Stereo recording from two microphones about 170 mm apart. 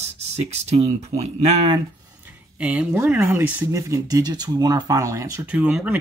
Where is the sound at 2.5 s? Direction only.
5° right (ahead or behind).